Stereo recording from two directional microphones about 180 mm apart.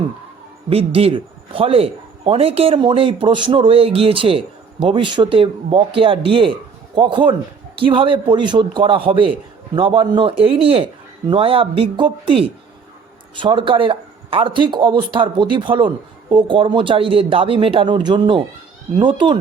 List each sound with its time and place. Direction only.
0.7 s a man's voice: 30° right (ahead or behind)